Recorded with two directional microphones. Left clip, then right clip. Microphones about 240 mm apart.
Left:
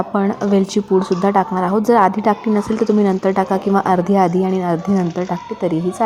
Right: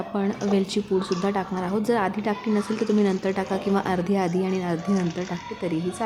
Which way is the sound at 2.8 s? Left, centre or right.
Centre.